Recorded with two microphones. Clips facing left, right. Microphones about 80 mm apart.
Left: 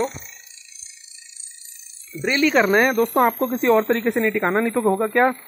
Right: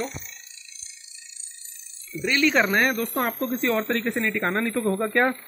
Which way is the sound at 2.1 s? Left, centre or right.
Left.